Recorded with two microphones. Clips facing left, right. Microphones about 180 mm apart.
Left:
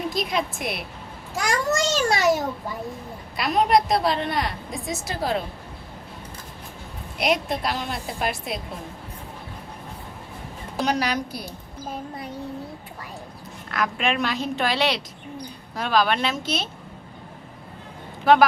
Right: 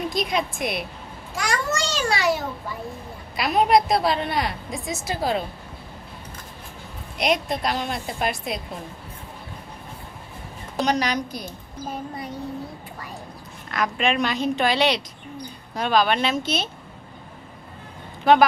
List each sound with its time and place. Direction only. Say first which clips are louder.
0.1 s a woman's voice: right 1 dB; centre (ahead or behind)
1.5 s a child's voice: left 3 dB; 45° left (ahead or behind)
3.3 s a woman's voice: right 1 dB; centre (ahead or behind)
7.2 s a woman's voice: even; 5° left (ahead or behind)
10.8 s a woman's voice: right 1 dB; 5° left (ahead or behind)
13.7 s a woman's voice: right 1 dB; centre (ahead or behind)
18.3 s a woman's voice: even; centre (ahead or behind)